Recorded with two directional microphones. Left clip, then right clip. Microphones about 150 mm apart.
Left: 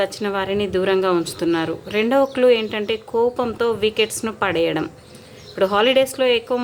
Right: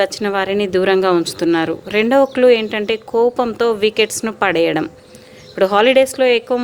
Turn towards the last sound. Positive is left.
turn(degrees=-30)  # may be behind; listen again after turning